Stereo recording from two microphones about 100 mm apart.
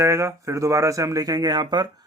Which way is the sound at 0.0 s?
30° right (ahead or behind).